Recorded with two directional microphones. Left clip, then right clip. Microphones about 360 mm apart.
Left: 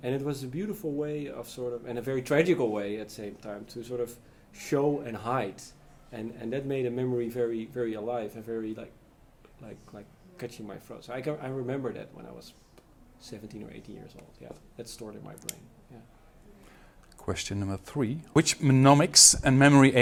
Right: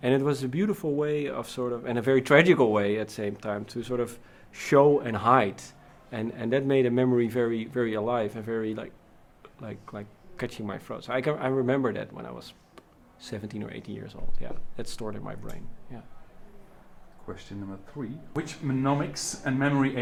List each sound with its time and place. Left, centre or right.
0.0 s speech: centre
17.2 s speech: left